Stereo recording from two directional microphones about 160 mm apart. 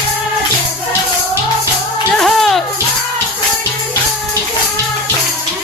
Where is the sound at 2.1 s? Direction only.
Centre (ahead or behind).